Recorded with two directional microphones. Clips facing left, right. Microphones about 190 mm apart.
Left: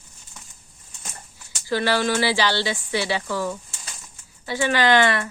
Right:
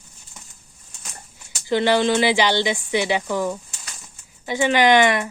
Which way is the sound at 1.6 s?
20° right (ahead or behind).